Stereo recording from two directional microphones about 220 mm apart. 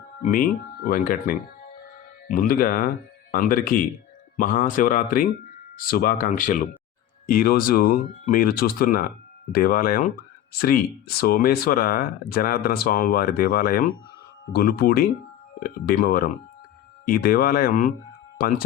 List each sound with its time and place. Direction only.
0.2 s speech: 40° left (ahead or behind)
11.2 s speech: 45° left (ahead or behind)